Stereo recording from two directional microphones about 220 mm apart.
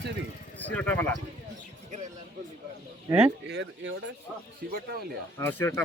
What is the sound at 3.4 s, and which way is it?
Speech, 55° right (ahead or behind).